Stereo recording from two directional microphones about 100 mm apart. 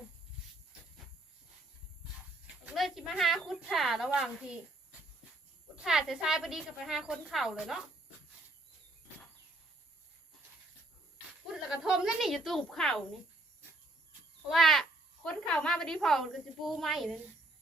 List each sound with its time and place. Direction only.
2.7 s a woman's voice: centre (ahead or behind)
5.8 s speech: 5° right (ahead or behind)
11.5 s speech: 5° right (ahead or behind)
14.5 s speech: centre (ahead or behind)